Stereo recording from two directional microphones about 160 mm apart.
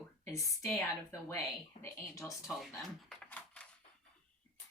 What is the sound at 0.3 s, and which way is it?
A woman's voice, 20° left (ahead or behind).